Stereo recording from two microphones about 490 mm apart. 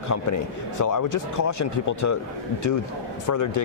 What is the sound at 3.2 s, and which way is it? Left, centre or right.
Speech, left.